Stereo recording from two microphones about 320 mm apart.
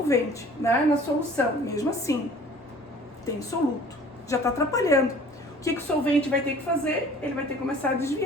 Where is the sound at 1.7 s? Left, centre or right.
Centre.